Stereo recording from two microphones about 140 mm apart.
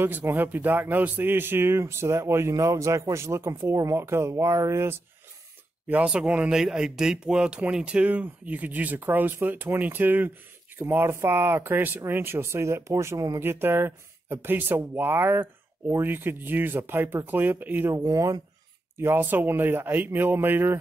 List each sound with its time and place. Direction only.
0.0 s speech: 15° right (ahead or behind)
5.9 s speech: 10° right (ahead or behind)